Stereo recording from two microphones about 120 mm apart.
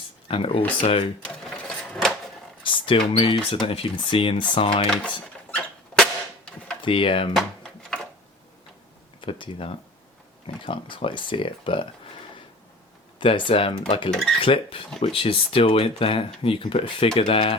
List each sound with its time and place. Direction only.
0.3 s speech: 50° left (ahead or behind)
1.2 s sewing machine: 5° left (ahead or behind)
2.6 s a sound: 45° left (ahead or behind)
3.1 s speech: 45° left (ahead or behind)
4.9 s speech: 10° left (ahead or behind)
6.0 s cap gun: 5° left (ahead or behind)
6.8 s speech: 45° left (ahead or behind)
7.3 s a sound: 5° left (ahead or behind)
9.2 s speech: 45° left (ahead or behind)
13.1 s speech: 45° left (ahead or behind)
14.1 s cutlery: 5° left (ahead or behind)
14.3 s speech: 45° left (ahead or behind)